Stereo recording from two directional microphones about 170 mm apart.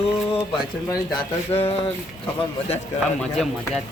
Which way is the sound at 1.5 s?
35° left (ahead or behind).